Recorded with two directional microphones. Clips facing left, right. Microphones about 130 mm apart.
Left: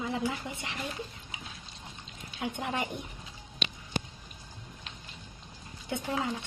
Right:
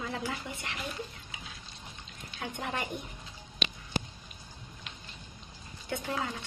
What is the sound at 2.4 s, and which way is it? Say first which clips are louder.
Speech: left 3 dB; 20° left (ahead or behind).